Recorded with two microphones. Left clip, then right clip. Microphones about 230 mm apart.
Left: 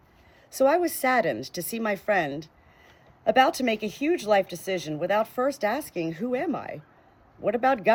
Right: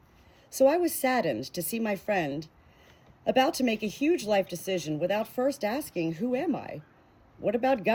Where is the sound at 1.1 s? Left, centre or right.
Left.